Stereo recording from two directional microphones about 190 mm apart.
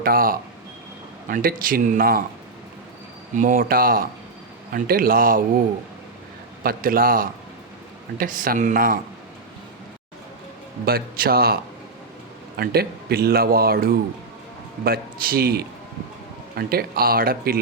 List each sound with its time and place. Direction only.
0.0 s speech: 50° right (ahead or behind)
3.3 s speech: 45° right (ahead or behind)
6.6 s speech: 50° right (ahead or behind)
10.8 s speech: 50° right (ahead or behind)